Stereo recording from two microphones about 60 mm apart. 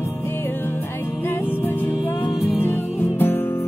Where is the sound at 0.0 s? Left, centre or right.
Left.